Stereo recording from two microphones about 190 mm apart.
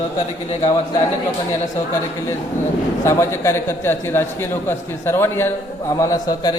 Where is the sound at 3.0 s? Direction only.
15° left (ahead or behind).